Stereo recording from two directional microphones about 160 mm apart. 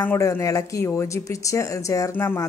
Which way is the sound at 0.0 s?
15° left (ahead or behind).